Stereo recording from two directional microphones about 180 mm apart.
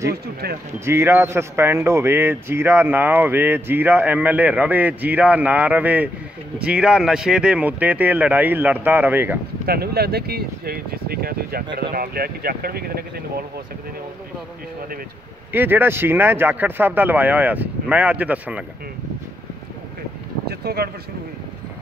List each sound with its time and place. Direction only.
0.1 s speech: 60° right (ahead or behind)
0.8 s speech: 15° right (ahead or behind)
9.7 s speech: 60° right (ahead or behind)
15.5 s speech: 10° right (ahead or behind)
20.4 s speech: 60° right (ahead or behind)